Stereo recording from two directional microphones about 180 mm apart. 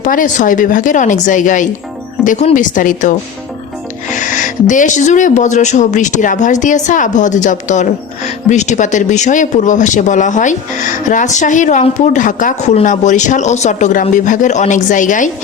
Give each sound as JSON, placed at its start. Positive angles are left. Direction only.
{"t": 0.0, "sound": "speech", "side_deg": 45}